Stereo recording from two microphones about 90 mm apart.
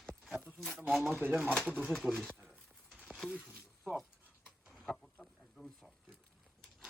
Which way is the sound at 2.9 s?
15° right (ahead or behind).